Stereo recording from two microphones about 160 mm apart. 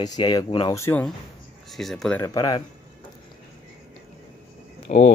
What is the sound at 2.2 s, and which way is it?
Speech, 25° left (ahead or behind).